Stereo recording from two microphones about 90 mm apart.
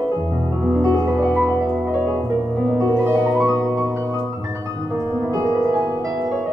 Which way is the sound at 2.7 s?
30° right (ahead or behind).